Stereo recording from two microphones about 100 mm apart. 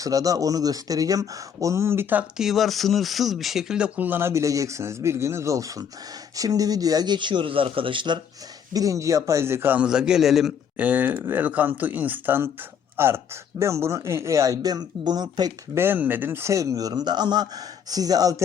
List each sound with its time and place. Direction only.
0.0 s a man's voice: 35° right (ahead or behind)
2.4 s speech: centre (ahead or behind); by 8.2 s 55° right (ahead or behind)
8.7 s a man's voice: 35° right (ahead or behind)
9.8 s a man's voice: 5° right (ahead or behind)
10.8 s a man's voice: 15° right (ahead or behind); by 15.5 s 45° right (ahead or behind)
15.7 s a man's voice: 20° right (ahead or behind); by 18.4 s 40° right (ahead or behind)